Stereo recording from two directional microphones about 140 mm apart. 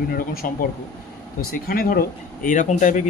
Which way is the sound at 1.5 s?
90° left.